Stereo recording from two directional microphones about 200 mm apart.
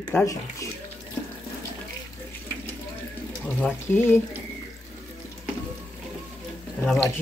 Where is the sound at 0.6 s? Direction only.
15° left (ahead or behind).